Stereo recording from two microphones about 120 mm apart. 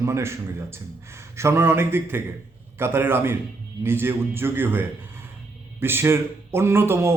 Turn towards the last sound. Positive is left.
turn(degrees=-20)  # may be behind; listen again after turning